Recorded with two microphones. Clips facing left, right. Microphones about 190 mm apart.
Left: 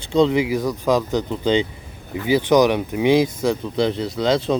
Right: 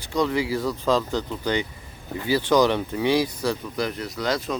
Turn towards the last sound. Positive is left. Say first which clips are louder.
# left 7 dB
turn(degrees=25)  # may be behind; listen again after turning